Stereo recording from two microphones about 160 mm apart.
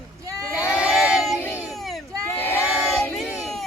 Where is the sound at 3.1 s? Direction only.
Centre (ahead or behind).